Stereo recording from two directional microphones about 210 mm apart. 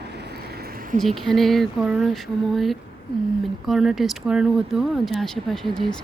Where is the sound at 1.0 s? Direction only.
Centre (ahead or behind).